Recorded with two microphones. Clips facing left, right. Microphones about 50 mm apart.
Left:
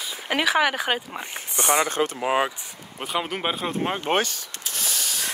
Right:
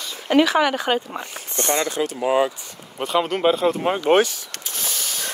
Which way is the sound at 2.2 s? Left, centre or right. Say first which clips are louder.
Right 5 dB; left.